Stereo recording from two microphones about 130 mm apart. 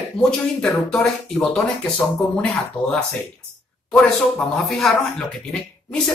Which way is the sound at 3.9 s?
5° left (ahead or behind).